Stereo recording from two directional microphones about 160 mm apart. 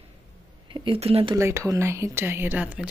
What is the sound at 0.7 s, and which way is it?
Speech, 30° right (ahead or behind).